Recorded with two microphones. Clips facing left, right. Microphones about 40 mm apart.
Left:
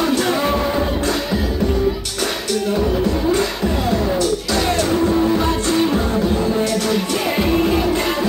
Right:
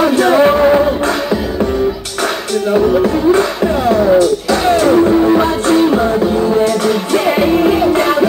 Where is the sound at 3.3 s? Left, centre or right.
Right.